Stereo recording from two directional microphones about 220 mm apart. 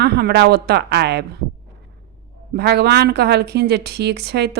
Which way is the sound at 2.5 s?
50° right (ahead or behind).